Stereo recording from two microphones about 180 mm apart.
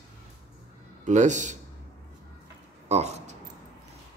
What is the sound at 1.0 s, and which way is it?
Speech, 40° right (ahead or behind).